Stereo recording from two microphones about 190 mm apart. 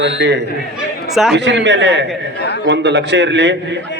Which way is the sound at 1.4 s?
70° right (ahead or behind).